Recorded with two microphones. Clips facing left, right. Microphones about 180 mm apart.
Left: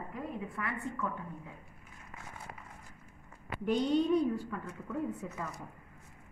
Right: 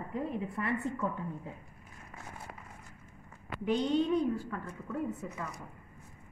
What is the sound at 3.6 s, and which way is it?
A woman's voice, centre (ahead or behind).